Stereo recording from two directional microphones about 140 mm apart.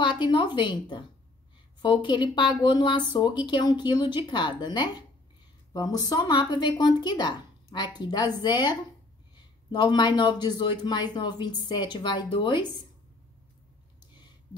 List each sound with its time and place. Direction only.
0.0 s speech: 35° left (ahead or behind)